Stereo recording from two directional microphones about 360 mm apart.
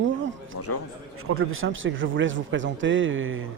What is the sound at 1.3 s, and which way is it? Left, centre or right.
Speech, right.